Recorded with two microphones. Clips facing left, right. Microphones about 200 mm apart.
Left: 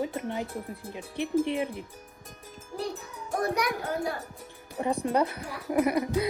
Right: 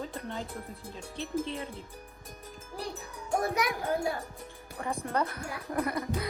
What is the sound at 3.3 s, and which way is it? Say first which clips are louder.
Speech: left 1 dB; centre (ahead or behind).